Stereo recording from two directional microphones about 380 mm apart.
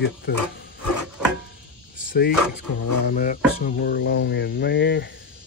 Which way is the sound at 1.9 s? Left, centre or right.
Left.